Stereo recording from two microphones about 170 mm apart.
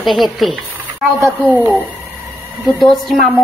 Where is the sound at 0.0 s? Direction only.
Centre (ahead or behind).